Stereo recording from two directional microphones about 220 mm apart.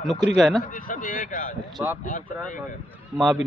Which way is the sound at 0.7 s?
35° left (ahead or behind).